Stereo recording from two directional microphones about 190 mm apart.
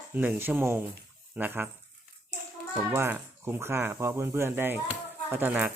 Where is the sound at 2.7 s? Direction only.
10° right (ahead or behind).